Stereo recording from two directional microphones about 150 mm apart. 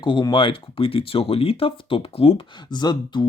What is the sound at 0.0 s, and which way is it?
Speech, 30° left (ahead or behind).